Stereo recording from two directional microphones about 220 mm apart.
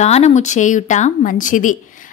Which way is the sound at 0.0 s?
30° left (ahead or behind).